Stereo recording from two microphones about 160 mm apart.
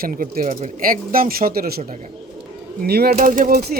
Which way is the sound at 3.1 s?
55° right (ahead or behind).